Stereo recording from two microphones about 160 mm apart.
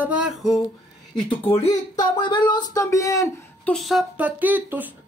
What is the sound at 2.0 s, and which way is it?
A woman's voice, 30° left (ahead or behind).